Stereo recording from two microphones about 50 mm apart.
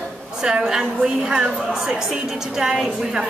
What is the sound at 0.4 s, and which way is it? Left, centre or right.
A woman's voice, centre.